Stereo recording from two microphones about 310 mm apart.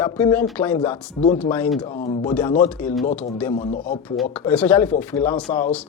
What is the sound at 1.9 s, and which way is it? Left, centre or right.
Speech, left.